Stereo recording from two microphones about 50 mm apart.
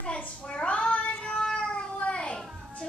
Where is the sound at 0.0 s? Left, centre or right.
Left.